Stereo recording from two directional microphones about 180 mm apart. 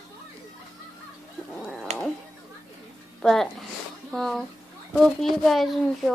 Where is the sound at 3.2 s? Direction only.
Centre (ahead or behind).